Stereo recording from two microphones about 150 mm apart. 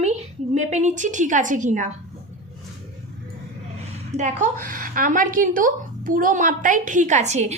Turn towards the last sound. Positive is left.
turn(degrees=-50)  # may be behind; listen again after turning